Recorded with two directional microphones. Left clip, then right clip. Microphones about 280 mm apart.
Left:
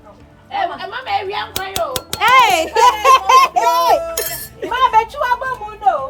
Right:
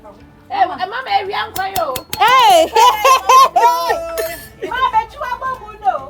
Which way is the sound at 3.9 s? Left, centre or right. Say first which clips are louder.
Left 4 dB; left.